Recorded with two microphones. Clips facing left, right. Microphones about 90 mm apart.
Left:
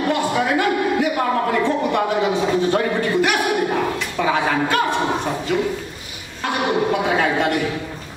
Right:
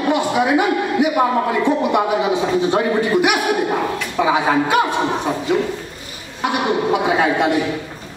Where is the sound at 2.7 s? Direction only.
15° right (ahead or behind).